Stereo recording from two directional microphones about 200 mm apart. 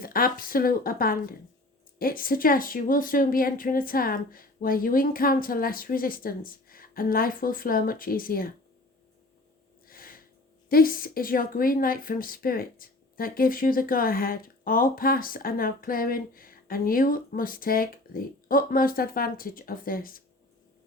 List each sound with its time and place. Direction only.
0.0 s a woman's voice: 45° left (ahead or behind)
9.8 s snort: 45° left (ahead or behind)
10.7 s a woman's voice: 45° left (ahead or behind)